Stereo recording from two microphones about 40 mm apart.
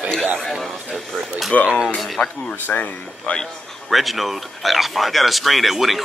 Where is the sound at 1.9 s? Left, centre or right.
Centre.